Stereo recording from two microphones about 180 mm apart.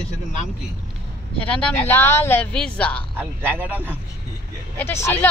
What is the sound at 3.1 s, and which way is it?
Speech, 10° right (ahead or behind).